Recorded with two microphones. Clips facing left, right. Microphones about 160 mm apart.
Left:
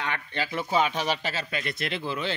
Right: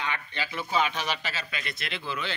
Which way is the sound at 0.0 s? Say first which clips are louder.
Left 2 dB; 55° left (ahead or behind).